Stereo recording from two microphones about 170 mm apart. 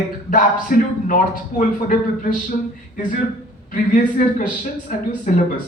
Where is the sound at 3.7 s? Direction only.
50° left (ahead or behind).